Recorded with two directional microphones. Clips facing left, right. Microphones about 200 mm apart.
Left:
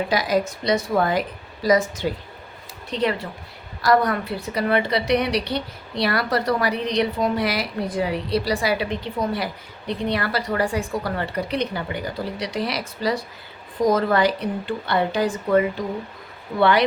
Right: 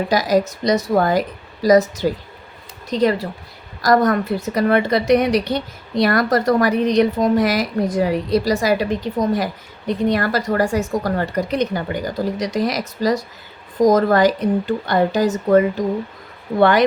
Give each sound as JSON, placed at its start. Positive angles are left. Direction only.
{"t": 0.1, "sound": "a woman's voice", "side_deg": -40}